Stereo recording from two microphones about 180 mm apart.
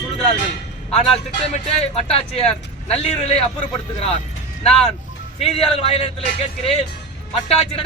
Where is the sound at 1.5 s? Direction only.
35° left (ahead or behind).